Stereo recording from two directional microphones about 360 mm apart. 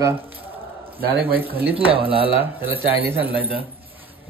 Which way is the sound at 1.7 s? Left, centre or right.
Centre.